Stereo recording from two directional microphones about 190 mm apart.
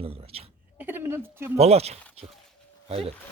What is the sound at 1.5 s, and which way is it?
Speech, 35° right (ahead or behind).